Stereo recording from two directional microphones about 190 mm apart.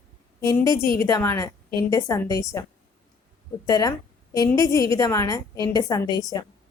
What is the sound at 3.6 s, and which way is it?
A woman's voice, 20° left (ahead or behind).